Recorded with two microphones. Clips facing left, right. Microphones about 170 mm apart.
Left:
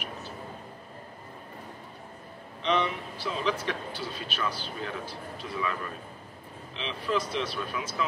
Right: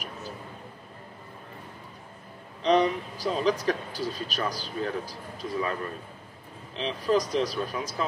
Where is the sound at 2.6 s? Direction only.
40° right (ahead or behind).